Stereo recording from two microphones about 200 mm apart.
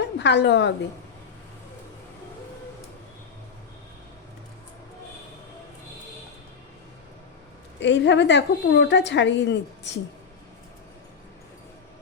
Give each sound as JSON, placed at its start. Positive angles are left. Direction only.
{"t": 0.0, "sound": "a woman's voice", "side_deg": 60}
{"t": 7.8, "sound": "a woman's voice", "side_deg": 65}